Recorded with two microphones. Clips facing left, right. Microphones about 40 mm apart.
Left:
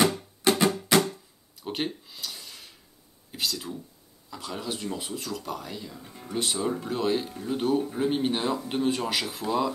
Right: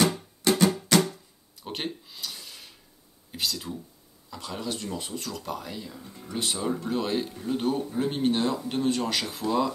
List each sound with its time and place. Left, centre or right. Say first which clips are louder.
0.0 s music: left 1 dB; centre
1.6 s a sound: left 3 dB; centre
3.3 s speech: even; centre
6.0 s speech: even; centre
6.3 s speech: left 1 dB; centre